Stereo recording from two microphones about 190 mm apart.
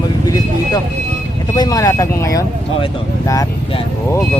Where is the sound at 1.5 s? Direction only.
20° left (ahead or behind).